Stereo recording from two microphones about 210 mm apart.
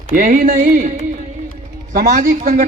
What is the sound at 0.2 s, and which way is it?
A man's voice, 40° right (ahead or behind).